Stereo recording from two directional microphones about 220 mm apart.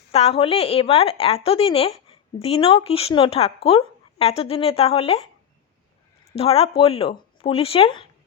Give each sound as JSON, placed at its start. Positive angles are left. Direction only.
{"t": 0.1, "sound": "a woman's voice", "side_deg": 25}
{"t": 6.3, "sound": "a woman's voice", "side_deg": 25}